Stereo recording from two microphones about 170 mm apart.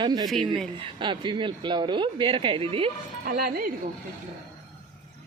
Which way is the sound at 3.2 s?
60° right (ahead or behind).